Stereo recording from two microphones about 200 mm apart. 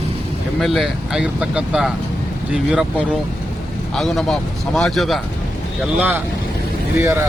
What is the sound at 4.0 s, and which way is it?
Speech, centre (ahead or behind).